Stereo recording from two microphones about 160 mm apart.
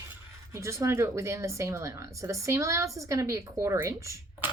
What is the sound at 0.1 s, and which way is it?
Speech, 15° right (ahead or behind).